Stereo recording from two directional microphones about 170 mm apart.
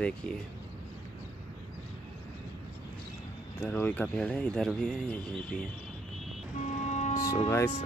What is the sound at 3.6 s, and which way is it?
Speech, 10° left (ahead or behind).